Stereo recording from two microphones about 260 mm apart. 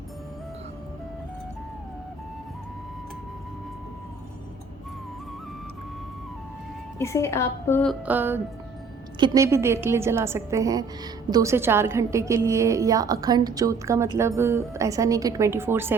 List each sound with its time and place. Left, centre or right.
7.0 s a woman's voice: centre
8.0 s a woman's voice: centre